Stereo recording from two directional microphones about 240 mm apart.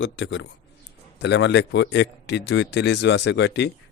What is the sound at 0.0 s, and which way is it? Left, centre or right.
A man's voice, left.